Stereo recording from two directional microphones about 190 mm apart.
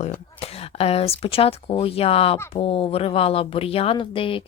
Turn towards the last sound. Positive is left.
turn(degrees=30)  # may be behind; listen again after turning